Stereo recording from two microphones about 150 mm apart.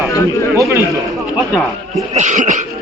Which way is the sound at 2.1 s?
55° right (ahead or behind).